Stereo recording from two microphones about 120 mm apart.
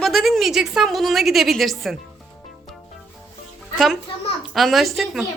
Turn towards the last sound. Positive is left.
turn(degrees=0)  # may be behind; listen again after turning